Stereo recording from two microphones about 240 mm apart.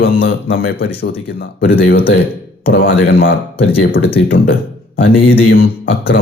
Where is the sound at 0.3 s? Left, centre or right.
Left.